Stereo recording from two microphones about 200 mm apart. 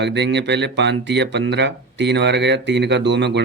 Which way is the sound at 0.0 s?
60° right (ahead or behind).